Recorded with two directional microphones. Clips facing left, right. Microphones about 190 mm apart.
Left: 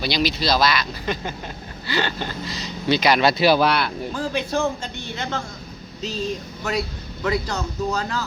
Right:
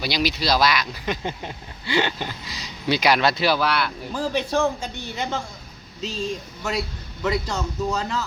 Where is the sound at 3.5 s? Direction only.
20° left (ahead or behind).